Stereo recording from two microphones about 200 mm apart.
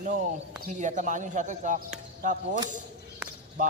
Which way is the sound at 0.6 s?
40° right (ahead or behind).